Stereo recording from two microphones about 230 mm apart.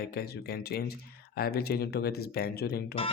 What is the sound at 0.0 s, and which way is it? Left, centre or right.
Speech, left.